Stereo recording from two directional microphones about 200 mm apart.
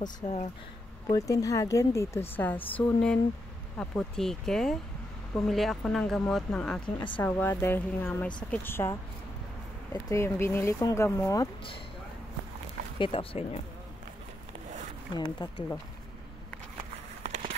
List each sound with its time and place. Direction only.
0.2 s speech: 35° left (ahead or behind)
1.1 s a woman's voice: 15° left (ahead or behind)
10.0 s a woman's voice: 15° left (ahead or behind)
13.0 s speech: 30° left (ahead or behind)
15.1 s speech: 20° left (ahead or behind)
17.2 s a sound: 35° right (ahead or behind)